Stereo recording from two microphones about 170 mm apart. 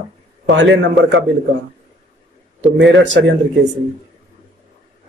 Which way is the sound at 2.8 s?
90° right.